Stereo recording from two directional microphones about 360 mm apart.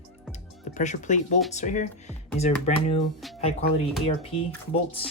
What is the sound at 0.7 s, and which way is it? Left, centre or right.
Speech, centre.